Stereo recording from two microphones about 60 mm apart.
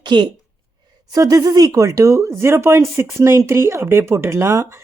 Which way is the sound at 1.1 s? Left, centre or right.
Right.